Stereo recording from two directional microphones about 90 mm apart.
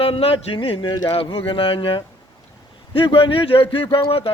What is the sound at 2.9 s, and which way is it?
Speech, 80° left.